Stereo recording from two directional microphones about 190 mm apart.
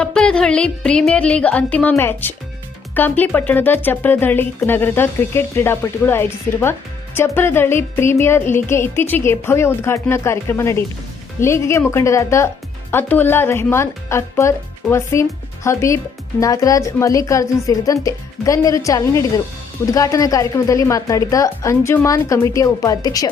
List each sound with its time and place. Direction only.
0.0 s speech: 5° left (ahead or behind)
2.9 s music: 10° left (ahead or behind)